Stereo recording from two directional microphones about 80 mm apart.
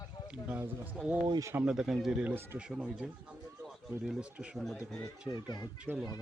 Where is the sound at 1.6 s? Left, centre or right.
Centre.